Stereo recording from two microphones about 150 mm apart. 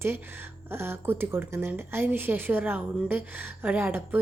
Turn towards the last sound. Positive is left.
turn(degrees=-15)  # may be behind; listen again after turning